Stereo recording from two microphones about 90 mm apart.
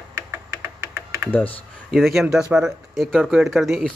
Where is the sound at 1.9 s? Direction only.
Centre (ahead or behind).